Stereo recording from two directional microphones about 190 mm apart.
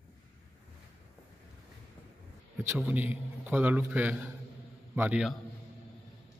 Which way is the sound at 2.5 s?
10° right (ahead or behind).